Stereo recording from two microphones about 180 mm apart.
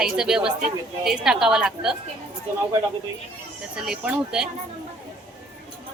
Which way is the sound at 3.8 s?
5° right (ahead or behind).